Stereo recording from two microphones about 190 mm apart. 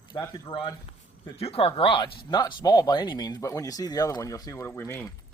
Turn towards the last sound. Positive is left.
turn(degrees=10)  # may be behind; listen again after turning